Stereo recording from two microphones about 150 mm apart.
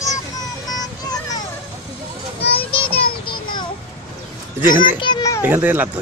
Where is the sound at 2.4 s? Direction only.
40° left (ahead or behind).